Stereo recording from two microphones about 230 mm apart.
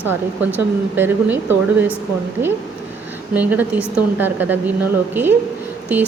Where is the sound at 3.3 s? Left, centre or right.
Centre.